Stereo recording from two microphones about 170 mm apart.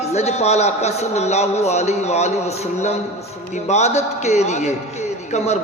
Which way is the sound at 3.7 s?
40° left (ahead or behind).